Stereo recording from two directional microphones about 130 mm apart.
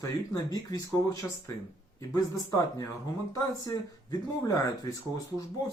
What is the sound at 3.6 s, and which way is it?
Speech, 30° left (ahead or behind).